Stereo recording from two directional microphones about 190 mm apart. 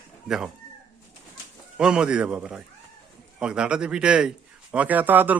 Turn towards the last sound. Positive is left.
turn(degrees=-10)  # may be behind; listen again after turning